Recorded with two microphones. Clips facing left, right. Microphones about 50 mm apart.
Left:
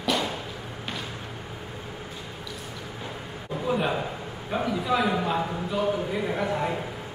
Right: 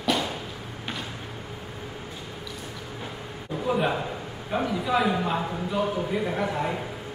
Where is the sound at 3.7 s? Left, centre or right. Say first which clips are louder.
Right 1 dB; centre.